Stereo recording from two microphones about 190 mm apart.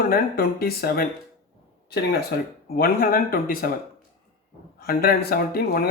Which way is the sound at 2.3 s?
50° left (ahead or behind).